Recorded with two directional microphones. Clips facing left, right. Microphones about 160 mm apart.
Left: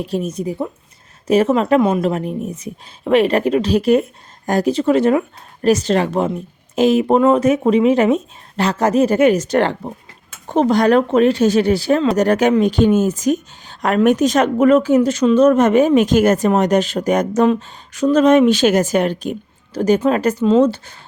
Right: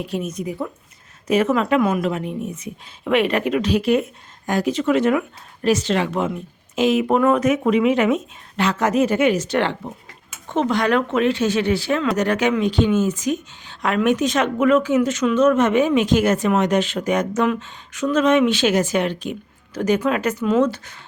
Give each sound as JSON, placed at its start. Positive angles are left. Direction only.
{"t": 0.0, "sound": "a woman's voice", "side_deg": 35}